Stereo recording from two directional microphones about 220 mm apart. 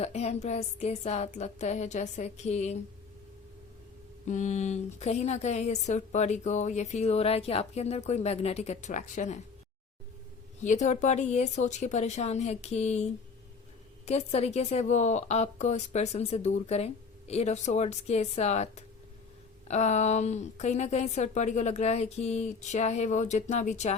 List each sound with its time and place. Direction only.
0.0 s speech: 30° left (ahead or behind)
4.3 s speech: 35° left (ahead or behind)
10.6 s speech: 35° left (ahead or behind)
14.1 s speech: 30° left (ahead or behind)